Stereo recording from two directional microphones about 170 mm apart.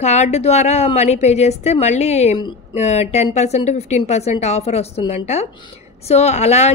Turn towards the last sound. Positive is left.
turn(degrees=40)  # may be behind; listen again after turning